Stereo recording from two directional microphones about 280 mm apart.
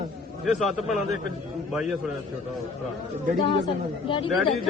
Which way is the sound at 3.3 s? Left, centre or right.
Centre.